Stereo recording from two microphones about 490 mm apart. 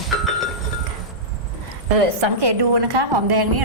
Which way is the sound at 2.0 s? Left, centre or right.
Right.